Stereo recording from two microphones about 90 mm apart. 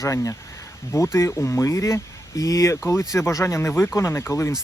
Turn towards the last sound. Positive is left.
turn(degrees=30)  # may be behind; listen again after turning